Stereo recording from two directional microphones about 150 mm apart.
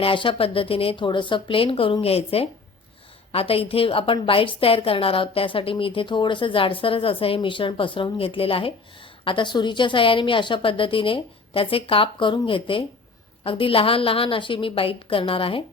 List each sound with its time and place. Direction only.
0.0 s a woman's voice: 35° left (ahead or behind)